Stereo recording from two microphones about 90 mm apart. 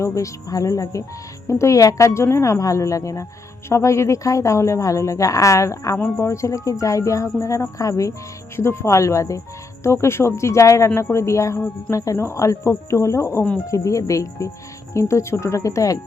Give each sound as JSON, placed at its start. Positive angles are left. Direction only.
{"t": 0.0, "sound": "a woman's voice", "side_deg": 35}